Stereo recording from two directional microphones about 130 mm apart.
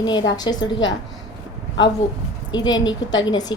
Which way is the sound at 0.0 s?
35° left (ahead or behind).